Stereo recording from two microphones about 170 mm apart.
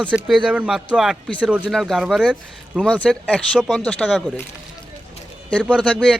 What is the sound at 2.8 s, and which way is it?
Speech, 5° left (ahead or behind).